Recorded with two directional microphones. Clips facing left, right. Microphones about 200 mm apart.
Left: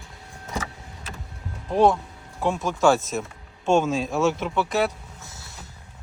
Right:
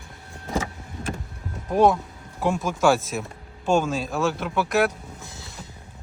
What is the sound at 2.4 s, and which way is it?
Speech, centre (ahead or behind).